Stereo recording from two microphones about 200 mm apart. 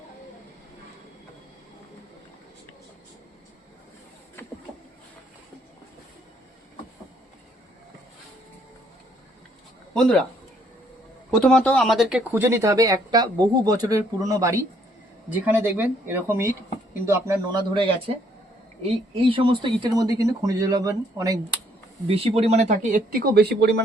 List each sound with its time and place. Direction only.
9.9 s speech: 5° left (ahead or behind)
11.3 s speech: centre (ahead or behind); by 17.6 s 15° right (ahead or behind)
18.8 s speech: 30° right (ahead or behind)
22.0 s speech: 30° right (ahead or behind); by 23.8 s 55° right (ahead or behind)